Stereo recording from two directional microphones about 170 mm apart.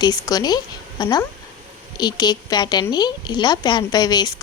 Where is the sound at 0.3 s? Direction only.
25° left (ahead or behind).